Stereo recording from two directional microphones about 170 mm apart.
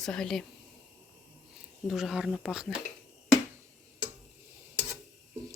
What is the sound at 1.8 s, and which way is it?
Speech, centre (ahead or behind).